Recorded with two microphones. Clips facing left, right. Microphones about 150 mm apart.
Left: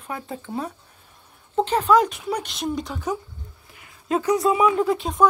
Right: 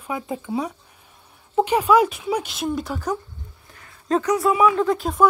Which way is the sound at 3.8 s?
15° left (ahead or behind).